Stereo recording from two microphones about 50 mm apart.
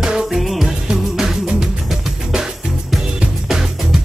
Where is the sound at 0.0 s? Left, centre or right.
Centre.